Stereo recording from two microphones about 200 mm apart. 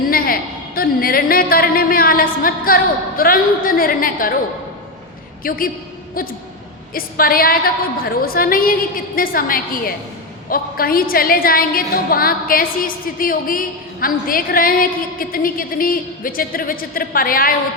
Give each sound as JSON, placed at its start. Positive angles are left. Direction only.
{"t": 0.1, "sound": "a sound", "side_deg": 45}
{"t": 0.8, "sound": "a woman's voice", "side_deg": 45}
{"t": 5.4, "sound": "a woman's voice", "side_deg": 45}